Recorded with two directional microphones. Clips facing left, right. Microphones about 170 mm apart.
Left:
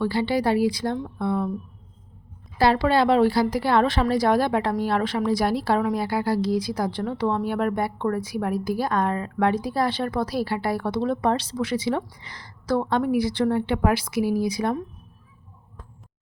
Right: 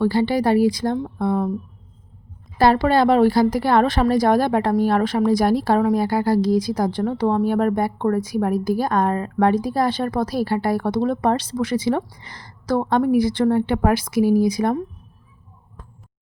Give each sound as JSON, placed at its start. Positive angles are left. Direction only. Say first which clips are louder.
{"t": 0.0, "sound": "a woman's voice", "louder": "right 4 dB", "side_deg": -45}
{"t": 2.6, "sound": "a woman's voice", "louder": "right 3 dB", "side_deg": -45}